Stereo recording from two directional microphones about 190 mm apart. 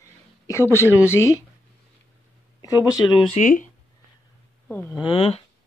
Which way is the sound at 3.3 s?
40° left (ahead or behind).